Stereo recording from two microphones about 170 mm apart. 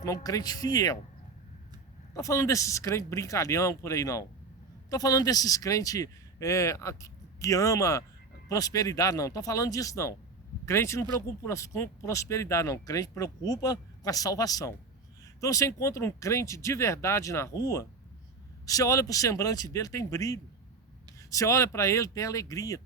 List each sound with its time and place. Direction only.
0.0 s speech: 20° left (ahead or behind)
2.1 s speech: 20° left (ahead or behind)